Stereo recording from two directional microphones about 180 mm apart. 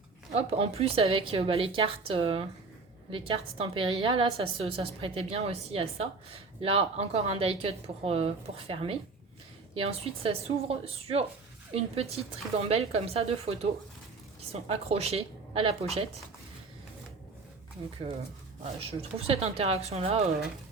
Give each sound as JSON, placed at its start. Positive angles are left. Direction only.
{"t": 0.3, "sound": "a woman's voice", "side_deg": -35}
{"t": 18.9, "sound": "a woman's voice", "side_deg": -35}